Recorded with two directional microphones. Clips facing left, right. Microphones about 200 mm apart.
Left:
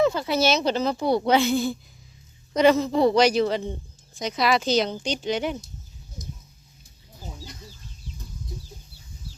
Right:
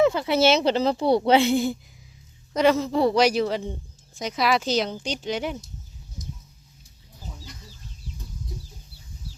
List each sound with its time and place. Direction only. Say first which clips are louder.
0.0 s speech: right 2 dB; 20° right (ahead or behind)
2.6 s speech: left 2 dB; 5° right (ahead or behind)